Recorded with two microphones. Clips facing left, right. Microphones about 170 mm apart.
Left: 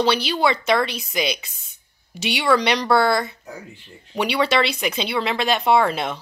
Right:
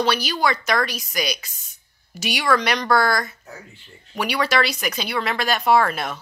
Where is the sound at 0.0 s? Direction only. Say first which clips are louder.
Left 2 dB; 25° left (ahead or behind).